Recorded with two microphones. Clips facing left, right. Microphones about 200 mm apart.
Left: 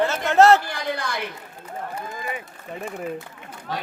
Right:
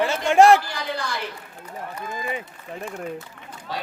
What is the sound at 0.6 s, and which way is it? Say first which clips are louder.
Speech: left 1 dB; 55° left (ahead or behind).